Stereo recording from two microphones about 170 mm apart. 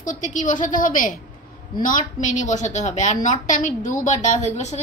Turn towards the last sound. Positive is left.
turn(degrees=40)  # may be behind; listen again after turning